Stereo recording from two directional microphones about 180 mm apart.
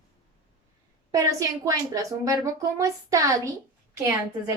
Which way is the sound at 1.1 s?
20° right (ahead or behind).